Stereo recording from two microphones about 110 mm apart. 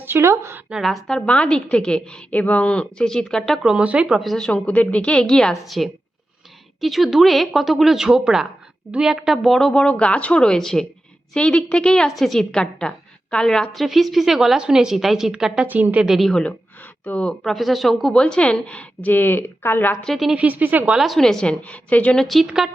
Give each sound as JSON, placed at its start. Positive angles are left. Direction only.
{"t": 0.0, "sound": "a woman's voice", "side_deg": -20}
{"t": 0.7, "sound": "a woman's voice", "side_deg": 0}
{"t": 4.2, "sound": "a woman's voice", "side_deg": 5}
{"t": 20.0, "sound": "a woman's voice", "side_deg": 0}
{"t": 20.3, "sound": "a woman's voice", "side_deg": -15}